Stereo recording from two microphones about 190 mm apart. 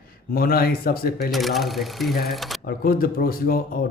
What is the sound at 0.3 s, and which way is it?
Speech, 50° left (ahead or behind).